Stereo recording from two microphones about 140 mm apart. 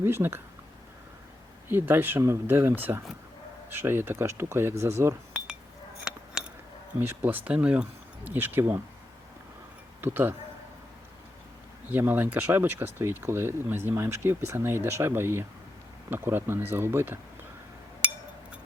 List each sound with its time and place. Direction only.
0.0 s speech: 15° right (ahead or behind)
1.6 s speech: 15° right (ahead or behind)
6.1 s mechanisms: 5° right (ahead or behind)
7.0 s speech: 15° right (ahead or behind)
10.0 s speech: 15° right (ahead or behind)
11.9 s speech: 15° right (ahead or behind)